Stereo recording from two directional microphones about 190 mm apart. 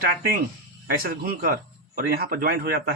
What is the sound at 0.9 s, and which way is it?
Speech, 50° right (ahead or behind).